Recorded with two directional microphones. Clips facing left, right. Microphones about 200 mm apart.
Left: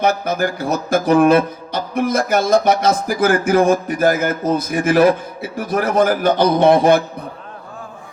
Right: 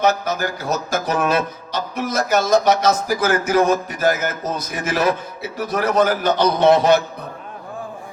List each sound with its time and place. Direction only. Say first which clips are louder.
0.0 s speech: left 2 dB; 55° left (ahead or behind)